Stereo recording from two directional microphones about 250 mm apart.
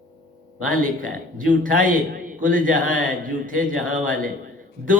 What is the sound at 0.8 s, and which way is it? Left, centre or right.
A man's voice, right.